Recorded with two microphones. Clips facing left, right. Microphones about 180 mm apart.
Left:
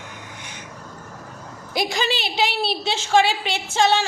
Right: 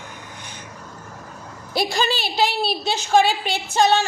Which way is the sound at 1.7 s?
20° left (ahead or behind).